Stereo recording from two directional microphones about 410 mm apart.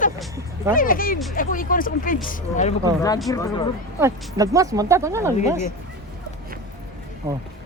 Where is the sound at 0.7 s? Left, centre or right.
Centre.